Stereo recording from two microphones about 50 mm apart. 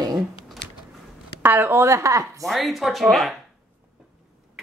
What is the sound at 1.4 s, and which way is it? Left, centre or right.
Speech, right.